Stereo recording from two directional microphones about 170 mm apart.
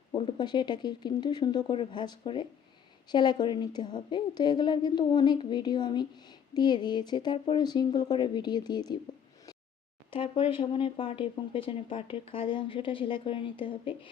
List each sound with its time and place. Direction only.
0.2 s a woman's voice: 30° left (ahead or behind)
10.1 s speech: 30° left (ahead or behind)